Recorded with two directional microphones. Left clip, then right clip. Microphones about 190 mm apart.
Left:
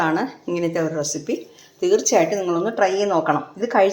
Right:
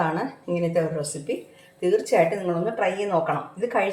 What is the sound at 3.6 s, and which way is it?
Speech, 35° left (ahead or behind).